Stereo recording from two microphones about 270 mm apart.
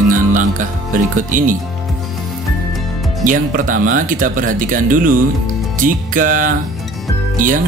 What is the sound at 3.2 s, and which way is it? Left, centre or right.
Speech, right.